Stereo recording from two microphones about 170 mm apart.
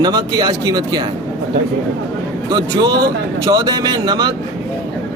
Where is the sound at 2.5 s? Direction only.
20° right (ahead or behind).